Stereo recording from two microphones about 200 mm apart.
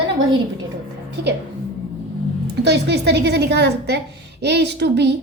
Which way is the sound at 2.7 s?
60° right (ahead or behind).